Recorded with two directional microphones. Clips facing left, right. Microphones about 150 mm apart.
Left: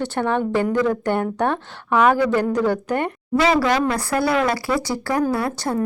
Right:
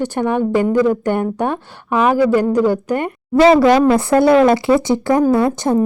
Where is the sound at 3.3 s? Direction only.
35° right (ahead or behind).